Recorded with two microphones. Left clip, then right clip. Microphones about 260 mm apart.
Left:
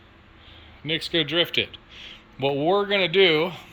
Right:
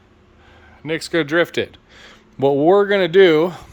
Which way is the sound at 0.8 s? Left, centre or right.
Right.